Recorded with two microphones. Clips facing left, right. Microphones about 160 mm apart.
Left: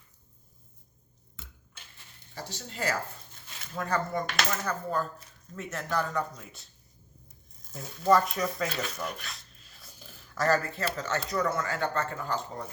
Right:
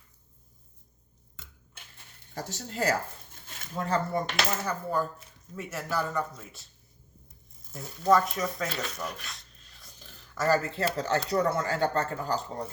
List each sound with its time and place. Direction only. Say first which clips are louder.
2.3 s speech: right 4 dB; 45° right (ahead or behind)
3.8 s speech: right 2 dB; 25° right (ahead or behind)
4.6 s speech: right 1 dB; 10° right (ahead or behind)
7.7 s speech: even; centre (ahead or behind)
10.3 s speech: right 1 dB; 5° right (ahead or behind)
10.6 s speech: right 3 dB; 30° right (ahead or behind)